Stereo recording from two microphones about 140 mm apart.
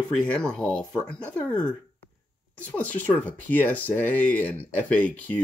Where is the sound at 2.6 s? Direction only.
10° left (ahead or behind).